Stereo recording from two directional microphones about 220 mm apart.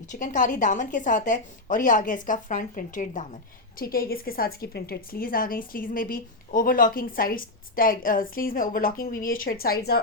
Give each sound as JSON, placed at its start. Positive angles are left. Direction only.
{"t": 0.1, "sound": "a woman's voice", "side_deg": 35}